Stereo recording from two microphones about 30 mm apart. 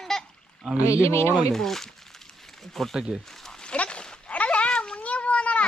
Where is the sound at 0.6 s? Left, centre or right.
Right.